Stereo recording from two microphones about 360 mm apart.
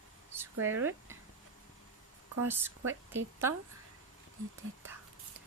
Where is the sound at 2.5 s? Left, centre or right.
Centre.